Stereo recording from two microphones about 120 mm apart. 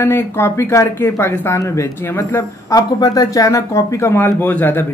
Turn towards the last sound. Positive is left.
turn(degrees=15)  # may be behind; listen again after turning